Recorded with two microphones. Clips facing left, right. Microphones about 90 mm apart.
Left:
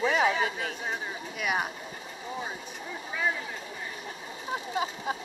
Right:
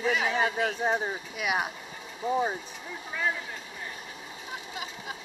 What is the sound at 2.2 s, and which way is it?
Speech, 40° right (ahead or behind).